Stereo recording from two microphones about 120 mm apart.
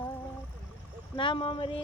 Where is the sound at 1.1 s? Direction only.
45° left (ahead or behind).